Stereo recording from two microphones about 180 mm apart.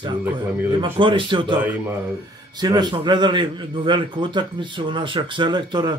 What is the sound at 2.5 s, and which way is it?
A man's voice, 20° right (ahead or behind).